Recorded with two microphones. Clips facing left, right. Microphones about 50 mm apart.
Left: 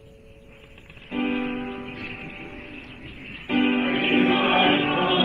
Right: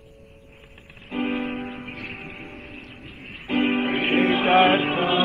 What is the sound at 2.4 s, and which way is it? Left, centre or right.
Music, left.